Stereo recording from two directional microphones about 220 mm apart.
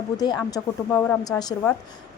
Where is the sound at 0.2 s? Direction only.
15° left (ahead or behind).